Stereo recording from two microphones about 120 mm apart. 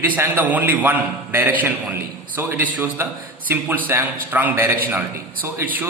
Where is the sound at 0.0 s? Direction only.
15° right (ahead or behind).